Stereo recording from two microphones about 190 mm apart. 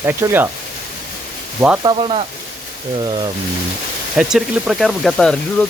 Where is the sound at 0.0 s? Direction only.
10° right (ahead or behind).